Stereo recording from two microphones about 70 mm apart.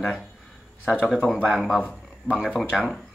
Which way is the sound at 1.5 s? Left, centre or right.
Centre.